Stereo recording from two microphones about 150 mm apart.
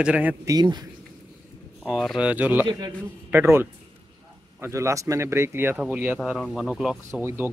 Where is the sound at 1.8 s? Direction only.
5° right (ahead or behind).